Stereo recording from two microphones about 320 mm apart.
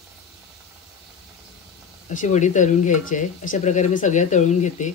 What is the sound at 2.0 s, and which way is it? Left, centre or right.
Speech, left.